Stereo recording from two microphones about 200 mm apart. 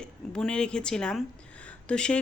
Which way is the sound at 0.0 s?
5° left (ahead or behind).